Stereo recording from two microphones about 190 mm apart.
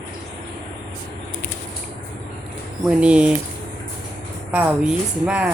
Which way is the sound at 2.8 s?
5° right (ahead or behind).